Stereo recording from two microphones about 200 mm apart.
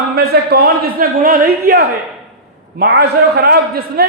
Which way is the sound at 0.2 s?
50° right (ahead or behind).